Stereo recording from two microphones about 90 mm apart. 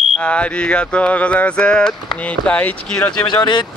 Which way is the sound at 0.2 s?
15° left (ahead or behind).